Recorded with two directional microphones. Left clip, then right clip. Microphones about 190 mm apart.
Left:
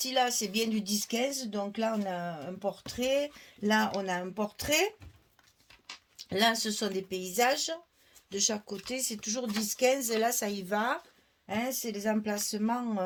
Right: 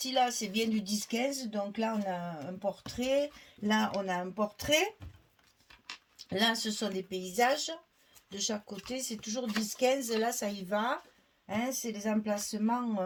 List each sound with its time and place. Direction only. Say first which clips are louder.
0.0 s speech: left 1 dB; 45° left (ahead or behind)
6.1 s speech: left 3 dB; 45° left (ahead or behind)